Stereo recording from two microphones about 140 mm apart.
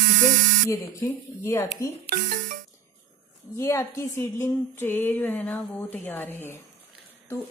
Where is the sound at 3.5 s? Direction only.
20° left (ahead or behind).